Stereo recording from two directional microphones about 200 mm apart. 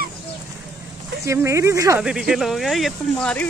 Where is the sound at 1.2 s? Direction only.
15° right (ahead or behind).